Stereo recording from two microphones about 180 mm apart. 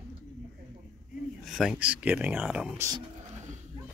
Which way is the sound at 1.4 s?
Centre (ahead or behind).